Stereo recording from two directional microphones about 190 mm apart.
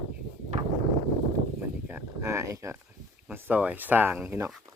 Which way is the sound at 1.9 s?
10° right (ahead or behind).